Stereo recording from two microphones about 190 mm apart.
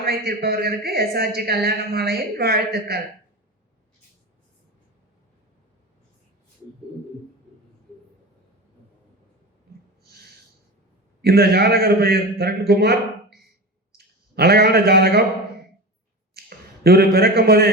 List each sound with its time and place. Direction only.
0.0 s speech: 55° right (ahead or behind)
11.2 s a man's voice: 55° right (ahead or behind)
16.3 s a sound: 55° right (ahead or behind)